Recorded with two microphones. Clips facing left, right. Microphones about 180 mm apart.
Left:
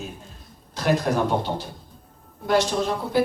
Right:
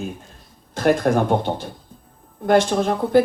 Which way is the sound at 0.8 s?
50° right (ahead or behind).